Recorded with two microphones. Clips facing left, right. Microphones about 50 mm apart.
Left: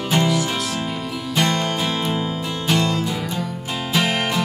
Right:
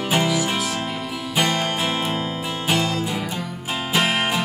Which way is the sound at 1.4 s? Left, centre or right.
Centre.